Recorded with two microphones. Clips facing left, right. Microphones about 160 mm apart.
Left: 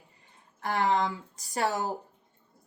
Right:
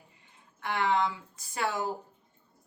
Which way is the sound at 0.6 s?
40° left (ahead or behind).